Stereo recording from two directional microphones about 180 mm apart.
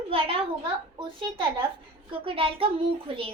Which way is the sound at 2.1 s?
30° right (ahead or behind).